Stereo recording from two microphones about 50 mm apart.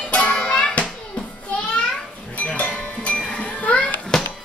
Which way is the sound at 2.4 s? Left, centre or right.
Left.